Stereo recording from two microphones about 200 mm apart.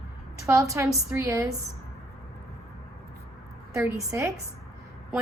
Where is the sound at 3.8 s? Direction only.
15° right (ahead or behind).